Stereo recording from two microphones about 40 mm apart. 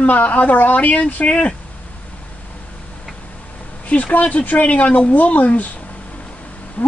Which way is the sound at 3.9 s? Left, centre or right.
Left.